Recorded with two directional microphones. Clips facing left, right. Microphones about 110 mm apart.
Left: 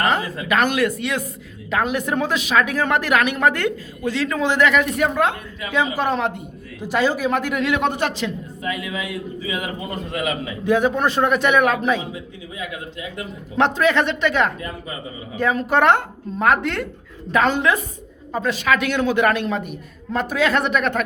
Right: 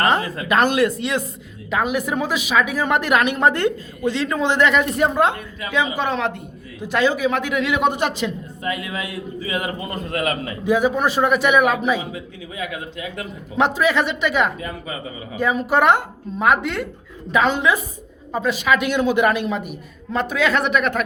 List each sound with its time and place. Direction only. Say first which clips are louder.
0.4 s a woman's voice: right 2 dB; 30° right (ahead or behind)
1.7 s a woman's voice: even; 10° right (ahead or behind); by 5.3 s 30° right (ahead or behind)
6.0 s a man's voice: left 1 dB; 5° left (ahead or behind)
7.8 s a man's voice: right 2 dB; 15° right (ahead or behind)
8.6 s a man's voice: even; 40° right (ahead or behind)
10.6 s a man's voice: even; 10° right (ahead or behind)
13.6 s a man's voice: left 1 dB; 5° right (ahead or behind)